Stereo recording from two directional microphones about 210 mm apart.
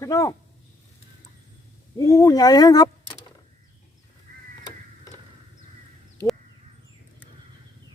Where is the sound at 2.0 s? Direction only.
15° left (ahead or behind).